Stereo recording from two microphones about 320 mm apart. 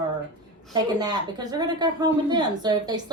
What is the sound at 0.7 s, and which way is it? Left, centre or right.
Speech, centre.